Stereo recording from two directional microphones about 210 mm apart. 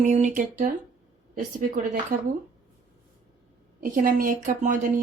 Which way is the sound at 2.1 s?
40° right (ahead or behind).